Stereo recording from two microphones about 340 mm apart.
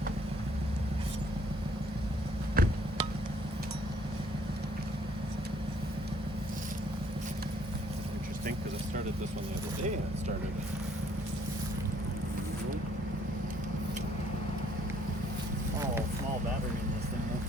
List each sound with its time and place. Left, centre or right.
2.6 s music: right